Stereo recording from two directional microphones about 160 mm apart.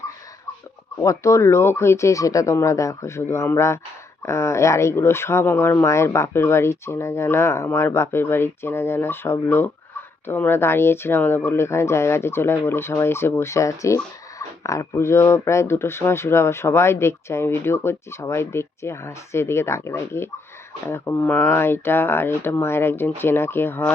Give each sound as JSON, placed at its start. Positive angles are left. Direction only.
{"t": 0.9, "sound": "speech", "side_deg": 20}